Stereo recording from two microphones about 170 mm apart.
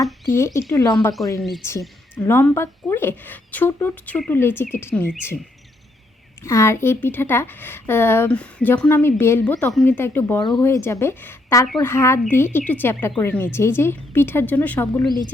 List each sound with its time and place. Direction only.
0.3 s speech: 15° left (ahead or behind)
1.4 s speech: centre (ahead or behind)
2.1 s speech: 15° left (ahead or behind)
6.4 s speech: 15° left (ahead or behind)